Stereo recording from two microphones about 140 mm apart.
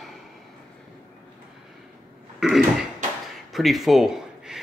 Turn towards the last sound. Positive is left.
turn(degrees=0)  # may be behind; listen again after turning